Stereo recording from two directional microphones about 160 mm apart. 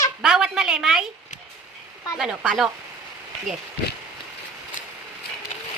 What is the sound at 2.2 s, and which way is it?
Speech, 5° right (ahead or behind).